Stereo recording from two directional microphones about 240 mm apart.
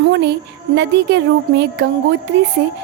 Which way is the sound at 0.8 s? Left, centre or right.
Right.